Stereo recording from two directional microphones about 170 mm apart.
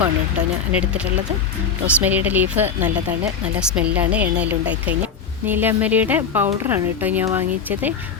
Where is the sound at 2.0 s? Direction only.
10° right (ahead or behind).